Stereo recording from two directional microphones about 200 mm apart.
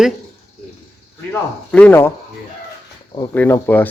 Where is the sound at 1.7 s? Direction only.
5° left (ahead or behind).